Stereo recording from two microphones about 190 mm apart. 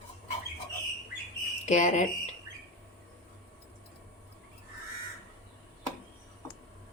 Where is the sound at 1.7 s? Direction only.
40° left (ahead or behind).